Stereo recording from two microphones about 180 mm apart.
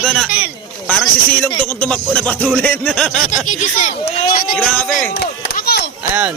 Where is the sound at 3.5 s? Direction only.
40° left (ahead or behind).